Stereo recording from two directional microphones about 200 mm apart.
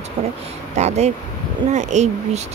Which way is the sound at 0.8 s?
35° right (ahead or behind).